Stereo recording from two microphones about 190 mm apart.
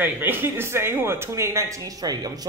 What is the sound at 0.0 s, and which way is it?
Speech, 10° right (ahead or behind).